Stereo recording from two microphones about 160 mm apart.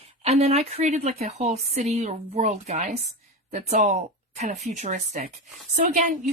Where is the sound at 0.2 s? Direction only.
40° right (ahead or behind).